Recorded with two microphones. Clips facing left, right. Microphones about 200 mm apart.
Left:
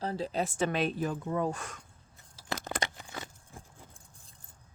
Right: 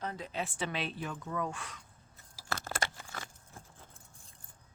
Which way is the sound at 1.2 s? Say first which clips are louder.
Left 6 dB; 30° left (ahead or behind).